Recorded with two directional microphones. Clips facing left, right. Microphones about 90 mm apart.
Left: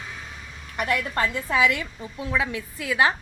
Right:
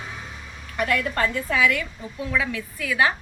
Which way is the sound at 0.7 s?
25° left (ahead or behind).